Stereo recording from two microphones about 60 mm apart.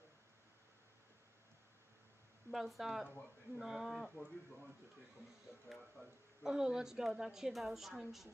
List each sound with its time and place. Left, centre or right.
2.5 s speech: centre
5.7 s speech: centre
6.4 s a woman's voice: centre